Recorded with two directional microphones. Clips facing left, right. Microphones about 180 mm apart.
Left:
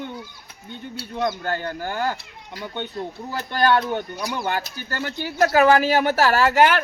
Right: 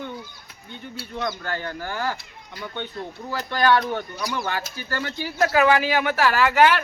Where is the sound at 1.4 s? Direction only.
45° left (ahead or behind).